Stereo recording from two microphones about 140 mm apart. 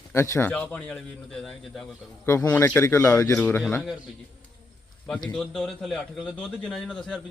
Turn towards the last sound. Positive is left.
turn(degrees=5)  # may be behind; listen again after turning